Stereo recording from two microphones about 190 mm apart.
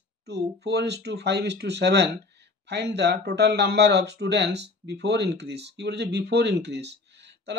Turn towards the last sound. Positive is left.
turn(degrees=-65)  # may be behind; listen again after turning